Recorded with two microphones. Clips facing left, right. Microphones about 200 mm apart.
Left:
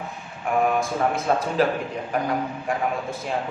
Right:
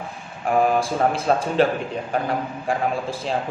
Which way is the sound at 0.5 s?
30° right (ahead or behind).